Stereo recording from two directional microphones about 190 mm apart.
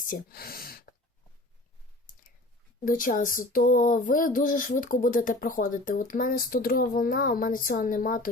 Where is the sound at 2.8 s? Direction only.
45° left (ahead or behind).